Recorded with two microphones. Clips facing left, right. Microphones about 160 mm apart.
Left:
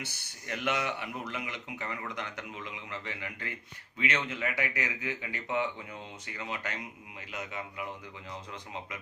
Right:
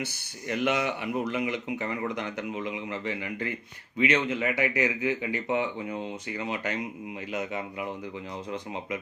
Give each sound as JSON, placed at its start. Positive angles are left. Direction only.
{"t": 0.0, "sound": "a man's voice", "side_deg": -20}